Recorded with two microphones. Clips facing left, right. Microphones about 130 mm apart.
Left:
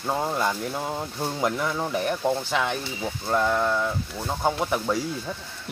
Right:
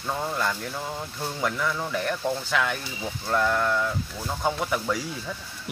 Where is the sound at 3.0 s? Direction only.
15° left (ahead or behind).